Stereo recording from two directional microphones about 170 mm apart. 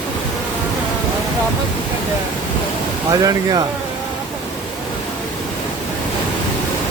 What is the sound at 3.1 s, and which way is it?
Speech, 20° right (ahead or behind).